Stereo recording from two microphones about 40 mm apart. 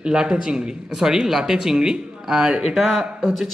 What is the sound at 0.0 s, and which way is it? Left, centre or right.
A man's voice, centre.